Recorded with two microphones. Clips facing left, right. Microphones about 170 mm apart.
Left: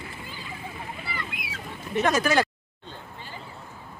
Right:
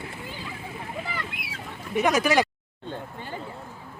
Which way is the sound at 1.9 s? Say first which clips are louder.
Right 1 dB; 15° right (ahead or behind).